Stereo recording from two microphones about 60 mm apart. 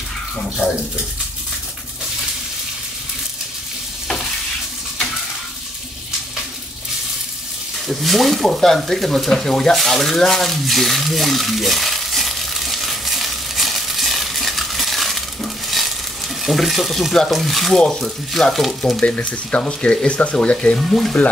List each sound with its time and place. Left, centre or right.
7.9 s frying: centre
16.4 s speech: centre
19.1 s speech: left